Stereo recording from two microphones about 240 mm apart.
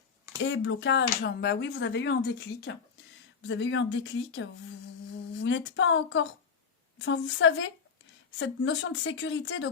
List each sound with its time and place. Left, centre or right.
0.4 s speech: left